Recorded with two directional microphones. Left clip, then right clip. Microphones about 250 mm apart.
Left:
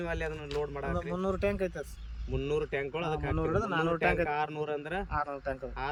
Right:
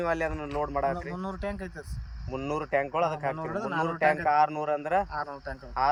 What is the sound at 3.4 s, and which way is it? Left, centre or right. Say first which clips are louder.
Speech: even; centre.